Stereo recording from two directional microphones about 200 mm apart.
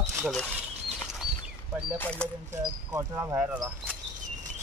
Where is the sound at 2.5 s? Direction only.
15° right (ahead or behind).